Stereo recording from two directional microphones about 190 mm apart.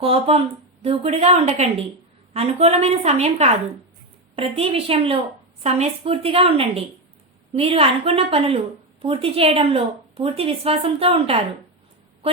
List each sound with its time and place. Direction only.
0.0 s a woman's voice: 30° right (ahead or behind)